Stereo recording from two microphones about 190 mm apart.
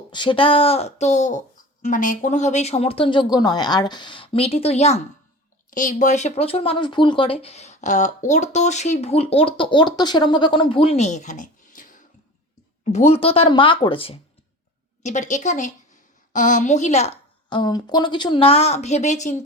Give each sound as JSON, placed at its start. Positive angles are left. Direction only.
{"t": 0.1, "sound": "speech", "side_deg": 25}
{"t": 15.0, "sound": "a woman's voice", "side_deg": 40}